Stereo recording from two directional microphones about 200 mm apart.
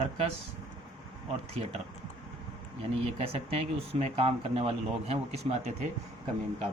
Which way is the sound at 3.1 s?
30° right (ahead or behind).